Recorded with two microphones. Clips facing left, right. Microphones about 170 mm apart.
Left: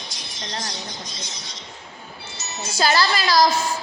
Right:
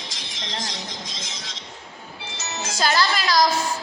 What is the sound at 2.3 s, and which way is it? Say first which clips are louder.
Music: right 2 dB; 90° right.